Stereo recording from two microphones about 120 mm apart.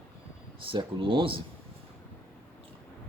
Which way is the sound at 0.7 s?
45° right (ahead or behind).